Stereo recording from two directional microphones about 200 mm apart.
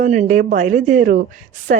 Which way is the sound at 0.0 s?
35° right (ahead or behind).